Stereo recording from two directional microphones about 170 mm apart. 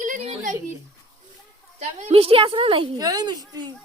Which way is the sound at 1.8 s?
45° right (ahead or behind).